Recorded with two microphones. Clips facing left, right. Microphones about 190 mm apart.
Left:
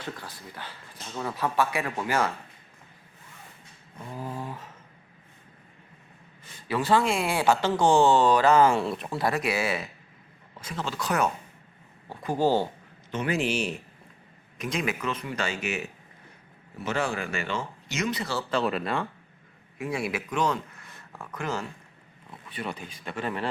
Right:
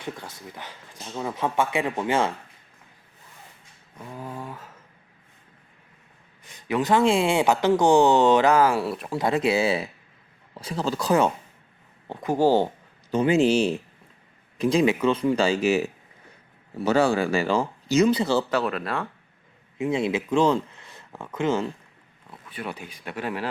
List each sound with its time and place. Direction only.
0.0 s speech: 20° right (ahead or behind)
4.0 s a sound: centre (ahead or behind)
6.5 s speech: 20° right (ahead or behind)
8.5 s a sound: 5° right (ahead or behind)
9.1 s speech: 20° right (ahead or behind)
12.0 s speech: 15° right (ahead or behind)
13.1 s speech: 30° right (ahead or behind)
18.5 s a sound: centre (ahead or behind)
19.8 s speech: 20° right (ahead or behind)
22.4 s speech: 5° right (ahead or behind)